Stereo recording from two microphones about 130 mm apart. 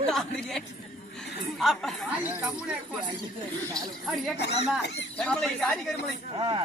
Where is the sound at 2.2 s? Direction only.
15° right (ahead or behind).